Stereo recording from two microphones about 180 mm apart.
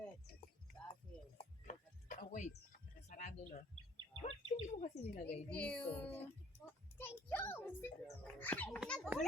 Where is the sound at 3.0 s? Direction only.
45° left (ahead or behind).